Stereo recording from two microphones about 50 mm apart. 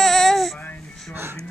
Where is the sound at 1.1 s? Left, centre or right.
Right.